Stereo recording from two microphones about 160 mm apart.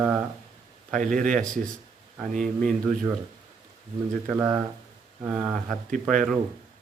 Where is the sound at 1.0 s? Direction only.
55° right (ahead or behind).